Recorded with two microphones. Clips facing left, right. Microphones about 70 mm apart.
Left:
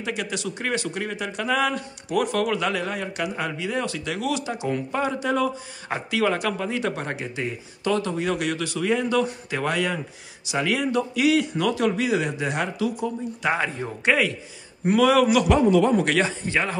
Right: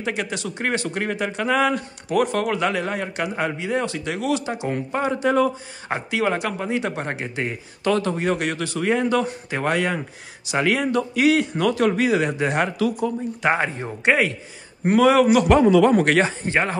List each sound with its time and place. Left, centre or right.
0.0 s speech: right
7.4 s speech: right
15.6 s speech: right
16.0 s speech: right
16.3 s speech: right